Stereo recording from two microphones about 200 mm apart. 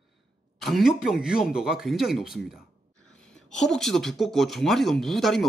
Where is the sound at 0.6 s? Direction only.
Centre (ahead or behind).